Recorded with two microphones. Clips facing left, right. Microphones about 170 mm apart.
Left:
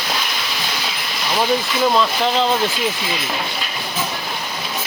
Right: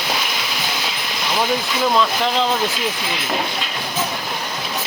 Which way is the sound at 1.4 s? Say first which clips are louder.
Left 2 dB; centre (ahead or behind).